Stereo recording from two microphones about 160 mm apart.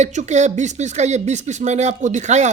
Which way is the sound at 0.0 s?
45° right (ahead or behind).